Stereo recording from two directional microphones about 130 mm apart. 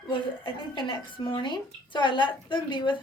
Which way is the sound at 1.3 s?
40° left (ahead or behind).